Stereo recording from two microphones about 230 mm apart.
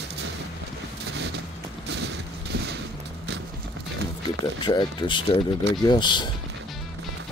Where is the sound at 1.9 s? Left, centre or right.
Right.